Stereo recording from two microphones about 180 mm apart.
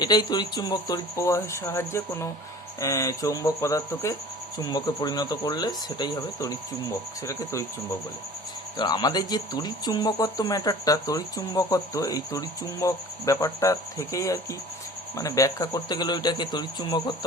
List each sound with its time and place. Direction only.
0.0 s speech: 25° left (ahead or behind)
8.8 s speech: 20° left (ahead or behind)